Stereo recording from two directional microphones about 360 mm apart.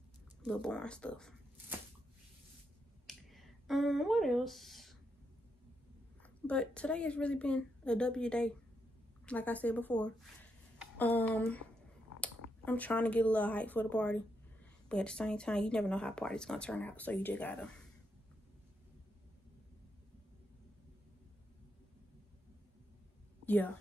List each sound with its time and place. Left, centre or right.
0.4 s speech: centre
3.1 s a sound: centre
6.2 s speech: centre
23.4 s a woman's voice: centre